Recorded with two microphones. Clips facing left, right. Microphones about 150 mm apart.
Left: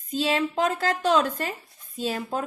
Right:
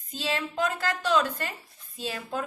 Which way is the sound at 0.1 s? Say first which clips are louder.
Left 7 dB; 50° left (ahead or behind).